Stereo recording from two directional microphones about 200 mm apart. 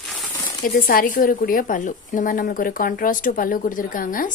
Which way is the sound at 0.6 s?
45° left (ahead or behind).